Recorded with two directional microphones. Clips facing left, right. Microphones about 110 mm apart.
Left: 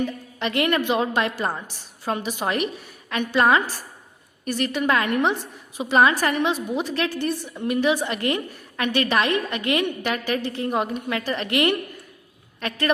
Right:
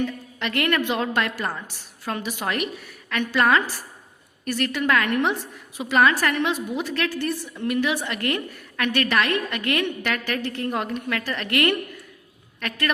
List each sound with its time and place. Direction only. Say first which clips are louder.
0.0 s a woman's voice: left 1 dB; 20° left (ahead or behind)